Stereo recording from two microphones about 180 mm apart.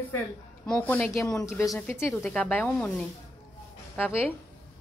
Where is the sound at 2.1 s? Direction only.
5° left (ahead or behind).